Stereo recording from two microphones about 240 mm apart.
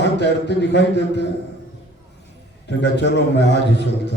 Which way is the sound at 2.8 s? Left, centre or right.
Left.